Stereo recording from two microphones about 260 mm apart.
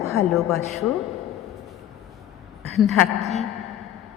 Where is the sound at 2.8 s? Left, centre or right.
Centre.